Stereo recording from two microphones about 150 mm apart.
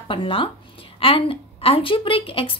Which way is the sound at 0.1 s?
35° left (ahead or behind).